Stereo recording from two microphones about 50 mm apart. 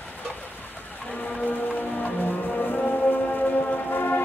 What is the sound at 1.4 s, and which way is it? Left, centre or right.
Music, left.